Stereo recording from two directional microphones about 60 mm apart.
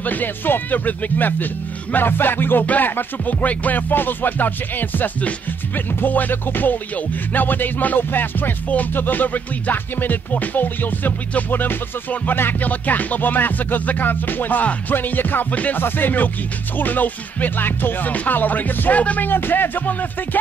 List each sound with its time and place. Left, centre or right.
0.0 s music: left